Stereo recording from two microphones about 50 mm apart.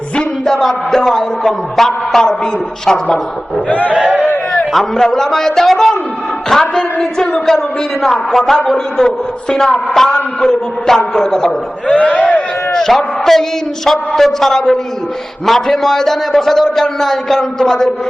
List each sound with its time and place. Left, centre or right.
0.2 s a man's voice: centre
3.7 s battle cry: left
3.9 s a man's voice: centre
4.5 s a man's voice: centre
11.9 s a man's voice: left
12.7 s a man's voice: centre